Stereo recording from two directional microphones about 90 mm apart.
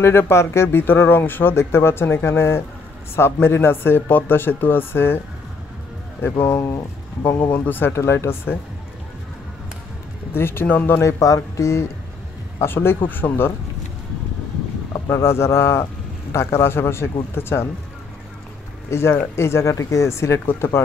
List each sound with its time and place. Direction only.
0.0 s speech: 25° left (ahead or behind)
7.5 s speech: 20° left (ahead or behind)
10.3 s speech: 25° left (ahead or behind)
15.0 s speech: 30° left (ahead or behind)
18.9 s speech: 30° left (ahead or behind)